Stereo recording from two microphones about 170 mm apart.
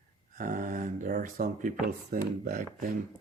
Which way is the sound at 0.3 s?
50° right (ahead or behind).